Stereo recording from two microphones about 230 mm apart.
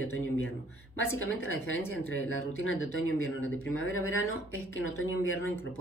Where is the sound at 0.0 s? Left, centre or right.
Left.